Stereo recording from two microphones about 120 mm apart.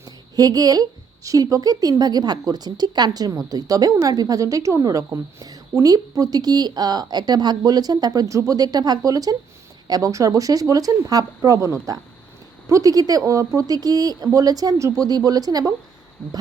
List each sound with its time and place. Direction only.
0.0 s a woman's voice: 30° right (ahead or behind)